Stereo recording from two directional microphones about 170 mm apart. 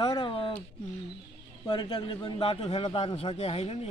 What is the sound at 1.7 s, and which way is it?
A man's voice, 30° left (ahead or behind).